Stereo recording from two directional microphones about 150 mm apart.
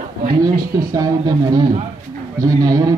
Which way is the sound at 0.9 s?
25° right (ahead or behind).